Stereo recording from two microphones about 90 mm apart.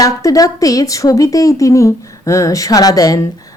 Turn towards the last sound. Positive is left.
turn(degrees=40)  # may be behind; listen again after turning